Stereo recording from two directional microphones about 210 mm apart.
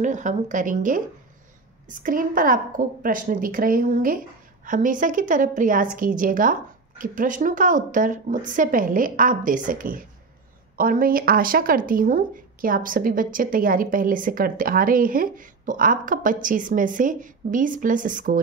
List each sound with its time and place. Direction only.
0.0 s speech: 35° right (ahead or behind)